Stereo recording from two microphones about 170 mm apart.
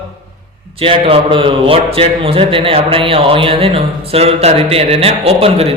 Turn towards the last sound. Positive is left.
turn(degrees=-35)  # may be behind; listen again after turning